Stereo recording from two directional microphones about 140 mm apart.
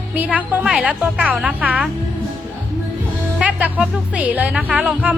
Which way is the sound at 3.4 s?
10° right (ahead or behind).